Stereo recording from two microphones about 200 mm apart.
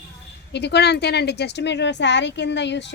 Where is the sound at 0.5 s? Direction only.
55° left (ahead or behind).